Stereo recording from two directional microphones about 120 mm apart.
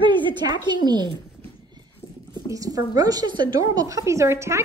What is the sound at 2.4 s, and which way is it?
A woman's voice, 30° right (ahead or behind).